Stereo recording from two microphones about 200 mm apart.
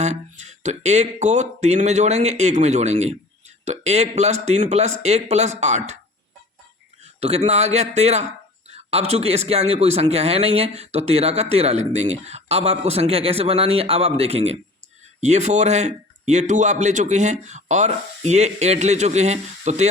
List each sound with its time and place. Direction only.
0.0 s speech: 35° right (ahead or behind)
7.2 s speech: 30° right (ahead or behind)